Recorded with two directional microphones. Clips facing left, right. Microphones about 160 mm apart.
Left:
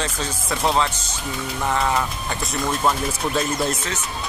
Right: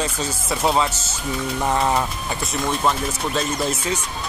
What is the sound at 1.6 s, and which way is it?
Speech, 20° right (ahead or behind).